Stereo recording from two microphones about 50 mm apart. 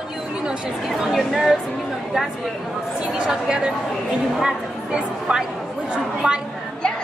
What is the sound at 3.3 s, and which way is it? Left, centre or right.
Speech, centre.